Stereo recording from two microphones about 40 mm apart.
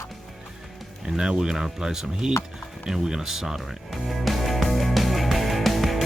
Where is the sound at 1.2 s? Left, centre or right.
Centre.